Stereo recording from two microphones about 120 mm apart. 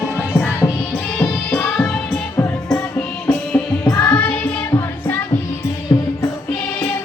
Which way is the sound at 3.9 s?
10° left (ahead or behind).